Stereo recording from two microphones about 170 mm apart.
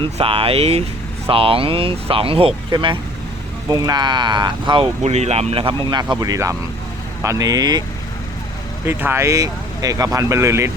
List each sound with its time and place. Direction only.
0.0 s speech: 35° right (ahead or behind)
8.9 s speech: 15° right (ahead or behind)